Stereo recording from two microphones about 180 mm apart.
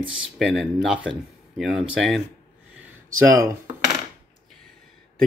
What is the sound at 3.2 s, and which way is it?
Speech, 15° right (ahead or behind).